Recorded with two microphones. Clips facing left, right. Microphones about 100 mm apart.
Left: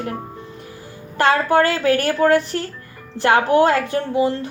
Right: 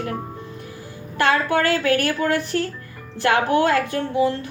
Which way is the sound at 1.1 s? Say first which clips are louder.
Left 4 dB; 35° left (ahead or behind).